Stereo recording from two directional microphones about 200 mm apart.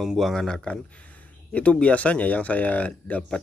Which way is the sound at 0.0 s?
Centre (ahead or behind).